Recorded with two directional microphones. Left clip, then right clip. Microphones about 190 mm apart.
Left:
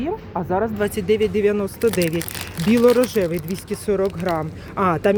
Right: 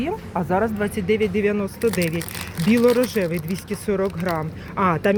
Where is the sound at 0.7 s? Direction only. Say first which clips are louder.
Left 2 dB; 10° left (ahead or behind).